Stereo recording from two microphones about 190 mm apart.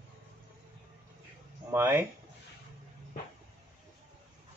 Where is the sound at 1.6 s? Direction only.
10° right (ahead or behind).